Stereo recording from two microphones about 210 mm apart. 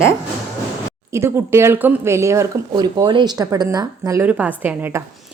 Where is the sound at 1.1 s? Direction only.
10° right (ahead or behind).